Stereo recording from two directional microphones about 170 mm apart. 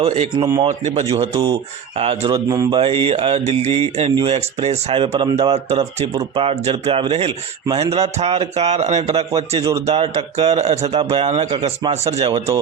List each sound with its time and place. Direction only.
0.0 s mantra: 40° right (ahead or behind)
0.3 s speech: 20° right (ahead or behind)
0.7 s mantra: 40° right (ahead or behind)